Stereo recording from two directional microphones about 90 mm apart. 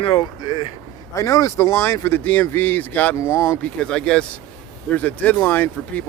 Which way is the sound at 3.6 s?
10° left (ahead or behind).